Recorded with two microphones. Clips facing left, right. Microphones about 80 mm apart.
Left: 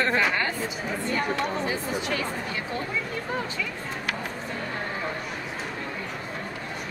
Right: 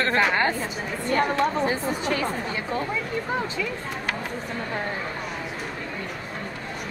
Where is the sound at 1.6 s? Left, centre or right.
Right.